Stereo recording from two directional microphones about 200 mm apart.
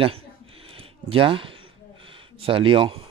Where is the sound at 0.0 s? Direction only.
30° right (ahead or behind).